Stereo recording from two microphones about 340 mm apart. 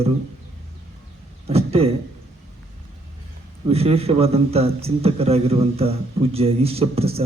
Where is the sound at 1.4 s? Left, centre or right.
Centre.